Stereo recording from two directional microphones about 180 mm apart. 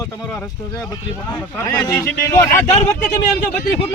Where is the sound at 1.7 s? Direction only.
10° left (ahead or behind).